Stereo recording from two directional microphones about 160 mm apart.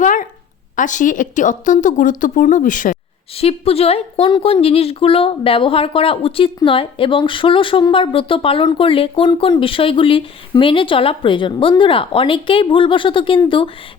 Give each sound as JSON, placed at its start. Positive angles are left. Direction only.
{"t": 0.0, "sound": "a sound", "side_deg": 55}
{"t": 0.8, "sound": "a woman's voice", "side_deg": 55}
{"t": 3.3, "sound": "speech", "side_deg": 40}